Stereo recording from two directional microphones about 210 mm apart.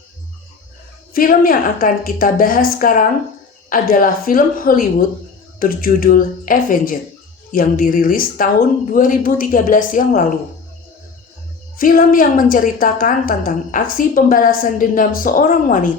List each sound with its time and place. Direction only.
1.1 s a woman's voice: 40° left (ahead or behind)
11.8 s a woman's voice: 40° left (ahead or behind)